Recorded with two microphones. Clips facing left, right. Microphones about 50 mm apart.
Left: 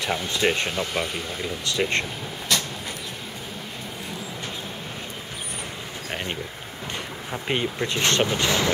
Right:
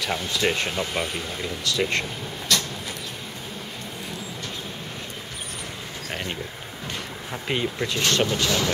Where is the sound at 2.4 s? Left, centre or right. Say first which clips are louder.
Right 1 dB; centre.